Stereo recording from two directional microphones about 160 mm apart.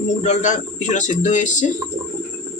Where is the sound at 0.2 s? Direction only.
45° left (ahead or behind).